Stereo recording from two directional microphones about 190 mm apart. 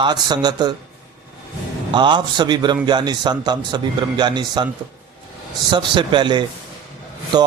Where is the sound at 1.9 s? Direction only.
25° right (ahead or behind).